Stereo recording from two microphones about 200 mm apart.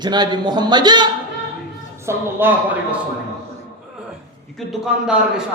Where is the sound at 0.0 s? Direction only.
20° right (ahead or behind).